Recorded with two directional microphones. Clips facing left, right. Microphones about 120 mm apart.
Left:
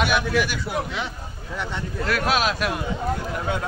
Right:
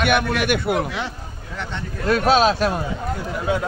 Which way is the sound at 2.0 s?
25° right (ahead or behind).